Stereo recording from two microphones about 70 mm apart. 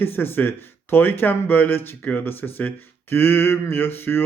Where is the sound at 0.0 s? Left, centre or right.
Left.